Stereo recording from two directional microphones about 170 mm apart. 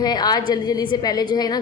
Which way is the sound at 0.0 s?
25° left (ahead or behind).